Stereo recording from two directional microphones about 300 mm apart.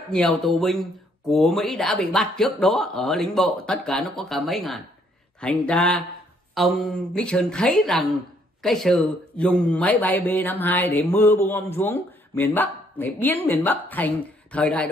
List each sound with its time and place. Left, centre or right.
0.1 s a man's voice: centre